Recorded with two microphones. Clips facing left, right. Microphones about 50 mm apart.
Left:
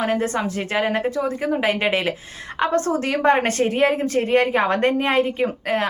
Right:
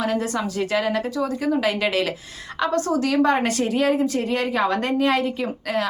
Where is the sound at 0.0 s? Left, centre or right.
Left.